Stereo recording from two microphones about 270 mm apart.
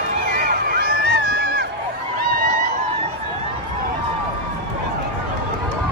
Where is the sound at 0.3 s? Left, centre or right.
Right.